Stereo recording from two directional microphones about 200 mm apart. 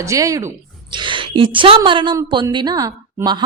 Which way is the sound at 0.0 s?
15° right (ahead or behind).